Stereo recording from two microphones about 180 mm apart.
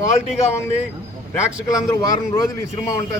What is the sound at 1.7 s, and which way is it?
Speech, 20° left (ahead or behind).